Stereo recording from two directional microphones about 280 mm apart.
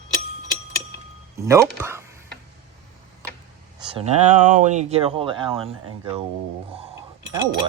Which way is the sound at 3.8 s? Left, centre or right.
Centre.